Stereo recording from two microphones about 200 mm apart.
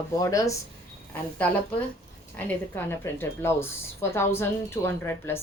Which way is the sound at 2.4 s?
10° left (ahead or behind).